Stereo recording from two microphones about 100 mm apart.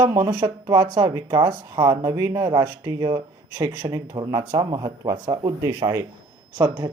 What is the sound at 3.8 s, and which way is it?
Speech, 55° right (ahead or behind).